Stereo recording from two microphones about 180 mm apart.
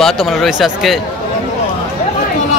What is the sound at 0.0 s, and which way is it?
Speech, centre (ahead or behind).